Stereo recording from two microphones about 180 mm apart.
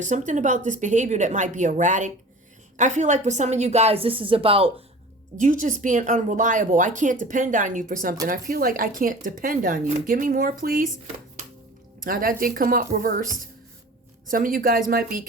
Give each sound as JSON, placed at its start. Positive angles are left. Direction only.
{"t": 0.0, "sound": "a woman's voice", "side_deg": -45}
{"t": 5.4, "sound": "speech", "side_deg": -45}
{"t": 12.0, "sound": "speech", "side_deg": -55}
{"t": 14.3, "sound": "speech", "side_deg": -50}